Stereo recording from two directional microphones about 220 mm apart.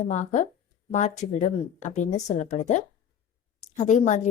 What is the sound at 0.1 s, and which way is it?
A woman's voice, 35° left (ahead or behind).